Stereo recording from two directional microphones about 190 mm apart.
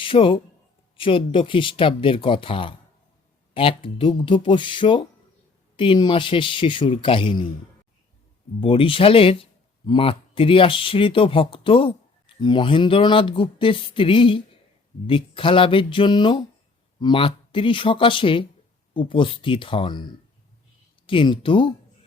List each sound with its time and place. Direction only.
0.0 s speech: 25° left (ahead or behind)
8.6 s speech: 30° left (ahead or behind)